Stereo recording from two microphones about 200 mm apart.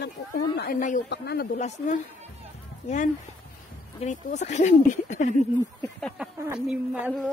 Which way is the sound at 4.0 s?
35° left (ahead or behind).